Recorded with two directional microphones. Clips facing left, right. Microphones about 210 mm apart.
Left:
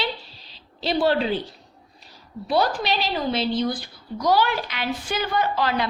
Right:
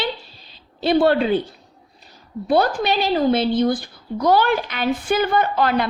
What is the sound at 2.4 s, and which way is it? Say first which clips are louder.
Speech: right 4 dB; 50° right (ahead or behind).